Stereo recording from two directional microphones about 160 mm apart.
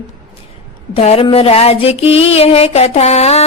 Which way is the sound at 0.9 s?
40° left (ahead or behind).